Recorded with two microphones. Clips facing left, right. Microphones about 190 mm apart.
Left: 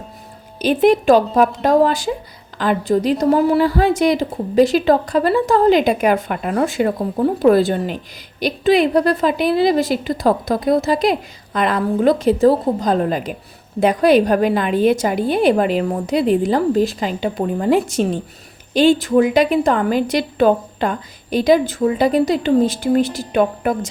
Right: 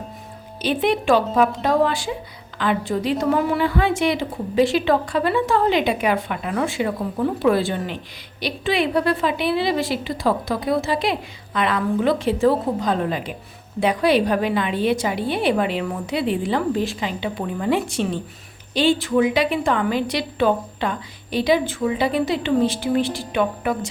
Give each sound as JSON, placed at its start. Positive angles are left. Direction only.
{"t": 0.6, "sound": "a woman's voice", "side_deg": 45}